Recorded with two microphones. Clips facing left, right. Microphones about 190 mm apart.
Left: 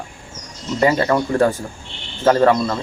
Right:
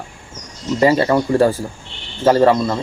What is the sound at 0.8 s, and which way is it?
Speech, 30° right (ahead or behind).